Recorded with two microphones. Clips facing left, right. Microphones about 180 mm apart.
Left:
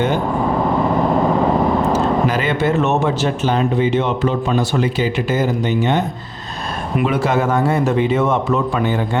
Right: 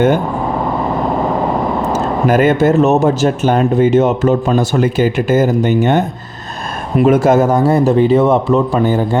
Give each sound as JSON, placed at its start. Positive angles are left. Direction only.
{"t": 1.9, "sound": "speech", "side_deg": -50}